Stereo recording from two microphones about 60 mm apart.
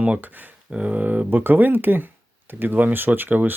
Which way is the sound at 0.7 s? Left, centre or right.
Right.